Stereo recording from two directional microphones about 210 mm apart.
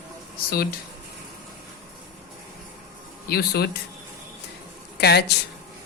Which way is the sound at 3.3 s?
50° left (ahead or behind).